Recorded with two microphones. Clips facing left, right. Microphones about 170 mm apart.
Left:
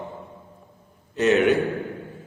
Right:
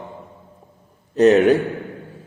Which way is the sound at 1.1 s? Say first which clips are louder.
Right 6 dB; 40° right (ahead or behind).